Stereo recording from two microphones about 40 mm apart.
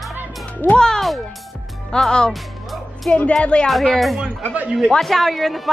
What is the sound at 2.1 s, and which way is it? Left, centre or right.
Speech, centre.